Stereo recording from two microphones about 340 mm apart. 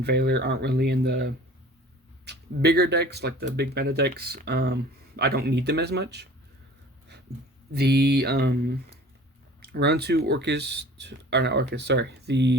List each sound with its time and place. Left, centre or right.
0.0 s speech: right
7.7 s speech: right